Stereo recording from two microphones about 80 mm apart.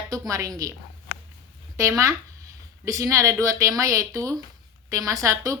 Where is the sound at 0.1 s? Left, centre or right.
Right.